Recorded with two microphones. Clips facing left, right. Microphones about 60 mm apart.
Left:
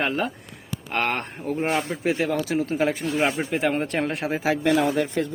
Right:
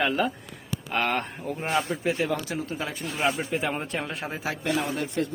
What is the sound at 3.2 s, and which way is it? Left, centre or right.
Speech, left.